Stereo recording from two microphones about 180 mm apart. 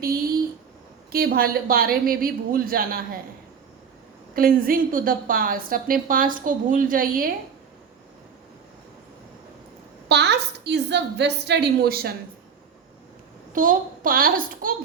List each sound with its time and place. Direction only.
1.1 s speech: 55° right (ahead or behind)
4.4 s a woman's voice: 55° right (ahead or behind)
10.1 s a woman's voice: 70° right (ahead or behind)
13.5 s a woman's voice: 50° right (ahead or behind)